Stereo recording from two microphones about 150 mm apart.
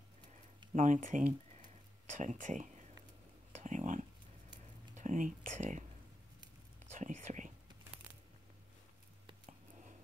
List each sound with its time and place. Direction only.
0.7 s speech: 55° right (ahead or behind)
3.5 s a sound: 55° right (ahead or behind)
4.9 s speech: 55° right (ahead or behind)
6.9 s whispering: 50° right (ahead or behind)